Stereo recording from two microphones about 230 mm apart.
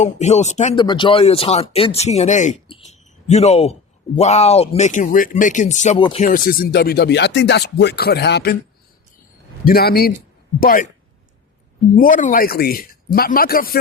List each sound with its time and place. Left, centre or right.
0.0 s speech: left
6.2 s speech: left
9.6 s a man's voice: left
11.9 s a man's voice: left